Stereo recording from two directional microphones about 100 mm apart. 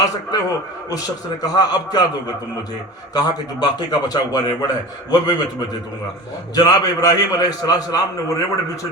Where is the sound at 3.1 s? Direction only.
40° left (ahead or behind).